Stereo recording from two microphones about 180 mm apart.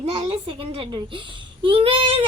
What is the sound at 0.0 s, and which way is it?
A woman's voice, 30° right (ahead or behind).